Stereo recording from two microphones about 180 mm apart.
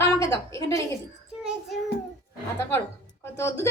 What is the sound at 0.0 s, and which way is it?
Speech, 15° left (ahead or behind).